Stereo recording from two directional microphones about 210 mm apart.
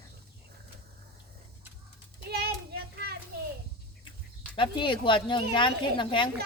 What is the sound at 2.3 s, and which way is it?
Hands, 50° right (ahead or behind).